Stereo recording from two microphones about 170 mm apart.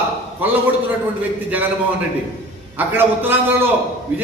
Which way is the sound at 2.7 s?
10° right (ahead or behind).